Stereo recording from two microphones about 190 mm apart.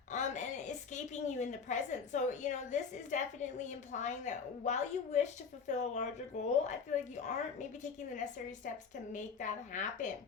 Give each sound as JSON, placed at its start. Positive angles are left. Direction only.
{"t": 0.1, "sound": "a woman's voice", "side_deg": 40}